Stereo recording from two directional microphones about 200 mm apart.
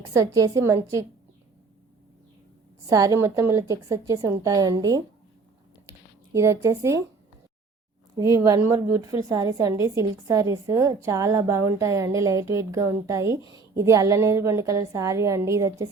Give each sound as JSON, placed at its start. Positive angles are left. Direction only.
{"t": 0.0, "sound": "a woman's voice", "side_deg": -15}
{"t": 2.8, "sound": "a woman's voice", "side_deg": -15}
{"t": 6.3, "sound": "a woman's voice", "side_deg": -15}
{"t": 8.2, "sound": "a woman's voice", "side_deg": -15}